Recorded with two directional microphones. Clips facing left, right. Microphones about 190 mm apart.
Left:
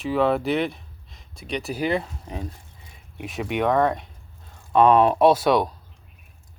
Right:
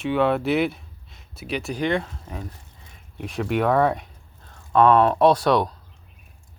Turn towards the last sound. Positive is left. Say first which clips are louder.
# even
turn(degrees=5)  # may be behind; listen again after turning